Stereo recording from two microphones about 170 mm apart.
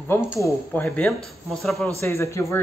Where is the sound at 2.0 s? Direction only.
15° left (ahead or behind).